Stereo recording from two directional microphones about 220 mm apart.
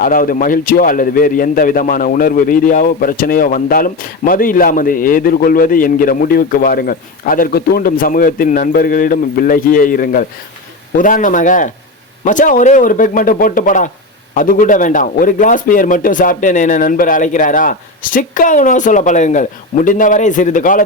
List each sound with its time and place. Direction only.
0.0 s a man's voice: 40° left (ahead or behind)